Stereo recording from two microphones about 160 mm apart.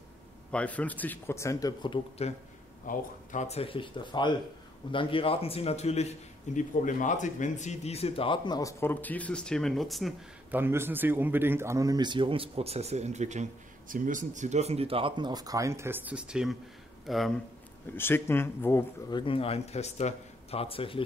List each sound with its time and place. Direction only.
0.5 s speech: 10° left (ahead or behind); by 2.0 s 25° left (ahead or behind)
2.2 s a man's voice: 40° left (ahead or behind); by 10.1 s centre (ahead or behind)
10.5 s speech: 15° right (ahead or behind)
17.9 s speech: 15° left (ahead or behind)
19.0 s a man's voice: 30° left (ahead or behind)